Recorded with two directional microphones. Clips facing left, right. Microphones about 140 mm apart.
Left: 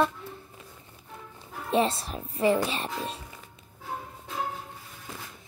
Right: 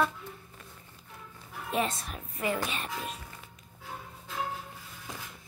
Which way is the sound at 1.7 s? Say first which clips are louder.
Left 6 dB; 30° left (ahead or behind).